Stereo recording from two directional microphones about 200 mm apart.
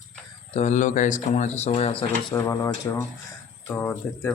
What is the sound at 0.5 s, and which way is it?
Speech, 35° left (ahead or behind).